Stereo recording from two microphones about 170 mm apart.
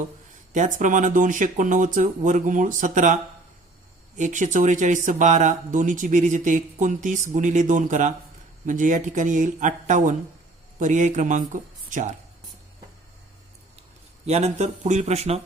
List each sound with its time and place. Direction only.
0.5 s speech: 45° right (ahead or behind)
4.2 s speech: 45° right (ahead or behind)
14.3 s speech: 40° right (ahead or behind)